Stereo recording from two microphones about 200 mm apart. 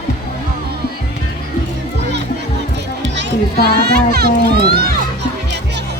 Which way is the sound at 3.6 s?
50° right (ahead or behind).